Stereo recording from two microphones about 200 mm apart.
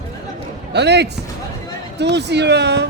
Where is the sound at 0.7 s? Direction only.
60° right (ahead or behind).